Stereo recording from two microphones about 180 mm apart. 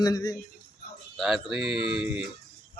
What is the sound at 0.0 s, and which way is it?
Speech, 20° left (ahead or behind).